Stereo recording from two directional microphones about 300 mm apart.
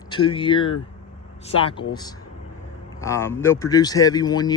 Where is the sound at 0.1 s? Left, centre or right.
Centre.